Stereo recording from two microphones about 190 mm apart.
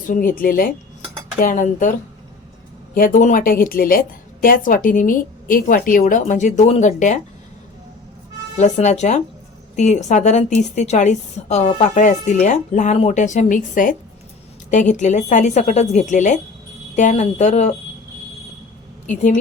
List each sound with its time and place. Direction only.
0.1 s a woman's voice: 45° left (ahead or behind)
8.5 s a woman's voice: 40° left (ahead or behind)